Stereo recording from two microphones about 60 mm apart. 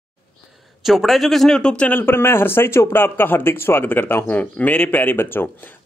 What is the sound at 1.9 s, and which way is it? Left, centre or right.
Speech, left.